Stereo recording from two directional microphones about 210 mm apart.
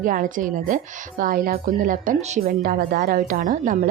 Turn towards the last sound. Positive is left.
turn(degrees=-40)  # may be behind; listen again after turning